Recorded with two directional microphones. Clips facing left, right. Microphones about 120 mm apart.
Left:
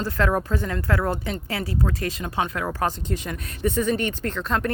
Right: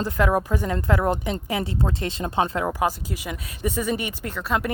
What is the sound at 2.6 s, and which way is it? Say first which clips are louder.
Speech: right 1 dB; 10° right (ahead or behind).